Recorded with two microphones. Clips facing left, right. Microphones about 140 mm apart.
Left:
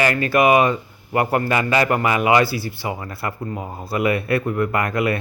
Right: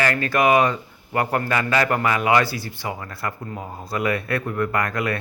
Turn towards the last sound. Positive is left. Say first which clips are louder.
# left 3 dB
turn(degrees=10)  # may be behind; listen again after turning